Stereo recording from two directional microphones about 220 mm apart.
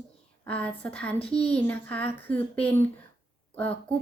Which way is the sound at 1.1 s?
25° left (ahead or behind).